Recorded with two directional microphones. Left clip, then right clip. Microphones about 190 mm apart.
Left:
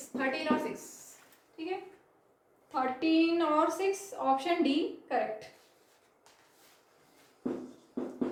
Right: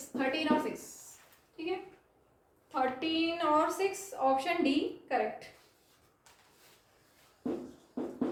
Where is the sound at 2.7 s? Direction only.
20° left (ahead or behind).